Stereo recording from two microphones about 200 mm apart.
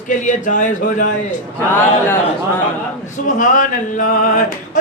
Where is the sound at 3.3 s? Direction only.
40° left (ahead or behind).